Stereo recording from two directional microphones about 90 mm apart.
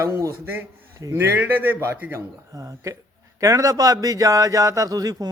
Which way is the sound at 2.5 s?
35° right (ahead or behind).